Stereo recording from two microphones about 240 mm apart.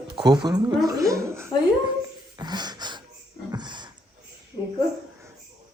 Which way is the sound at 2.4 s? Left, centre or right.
Centre.